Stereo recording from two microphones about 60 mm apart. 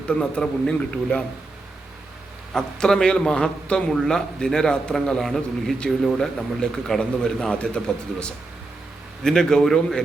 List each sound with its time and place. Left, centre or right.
0.1 s a man's voice: centre
2.5 s a man's voice: centre
9.2 s a man's voice: centre